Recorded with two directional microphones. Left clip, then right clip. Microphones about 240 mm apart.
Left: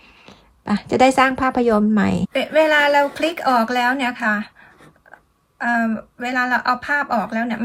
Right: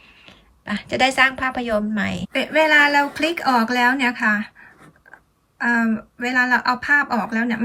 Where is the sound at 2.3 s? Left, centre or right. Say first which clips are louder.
Even; centre.